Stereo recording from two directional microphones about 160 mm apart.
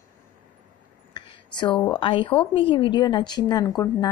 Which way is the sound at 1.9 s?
35° left (ahead or behind).